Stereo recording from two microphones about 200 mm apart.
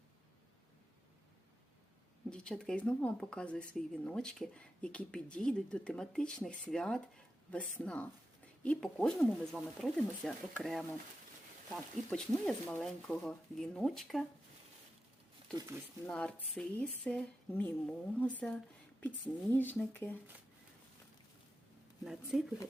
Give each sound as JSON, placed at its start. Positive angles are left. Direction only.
{"t": 2.3, "sound": "speech", "side_deg": 5}
{"t": 15.5, "sound": "speech", "side_deg": -15}
{"t": 16.0, "sound": "speech", "side_deg": 5}
{"t": 22.0, "sound": "speech", "side_deg": 0}